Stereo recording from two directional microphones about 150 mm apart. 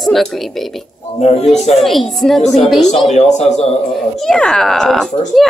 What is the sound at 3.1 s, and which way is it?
Speech, 50° left (ahead or behind).